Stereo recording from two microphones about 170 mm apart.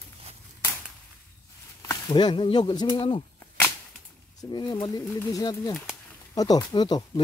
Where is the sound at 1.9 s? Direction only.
25° left (ahead or behind).